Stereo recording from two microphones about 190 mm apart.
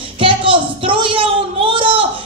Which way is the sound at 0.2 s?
25° right (ahead or behind).